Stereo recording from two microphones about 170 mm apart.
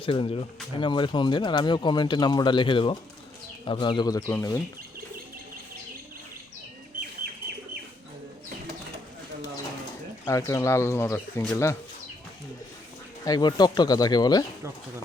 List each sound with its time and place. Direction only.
0.0 s speech: 30° left (ahead or behind); by 4.6 s 15° left (ahead or behind)
7.2 s bird: 65° right (ahead or behind)
10.2 s speech: 20° left (ahead or behind)
13.2 s speech: 25° left (ahead or behind)